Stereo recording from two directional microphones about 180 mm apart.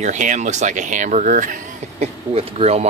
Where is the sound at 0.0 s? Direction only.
45° right (ahead or behind).